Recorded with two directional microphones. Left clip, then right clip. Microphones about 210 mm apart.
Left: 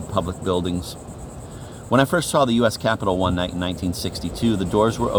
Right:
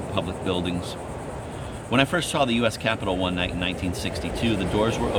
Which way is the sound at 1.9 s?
30° left (ahead or behind).